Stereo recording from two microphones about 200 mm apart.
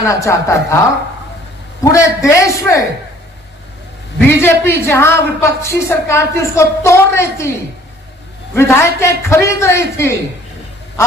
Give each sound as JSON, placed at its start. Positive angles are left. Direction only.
{"t": 0.0, "sound": "a woman's voice", "side_deg": 15}
{"t": 1.8, "sound": "a woman's voice", "side_deg": 15}
{"t": 4.4, "sound": "a woman's voice", "side_deg": 10}
{"t": 8.5, "sound": "a woman's voice", "side_deg": 10}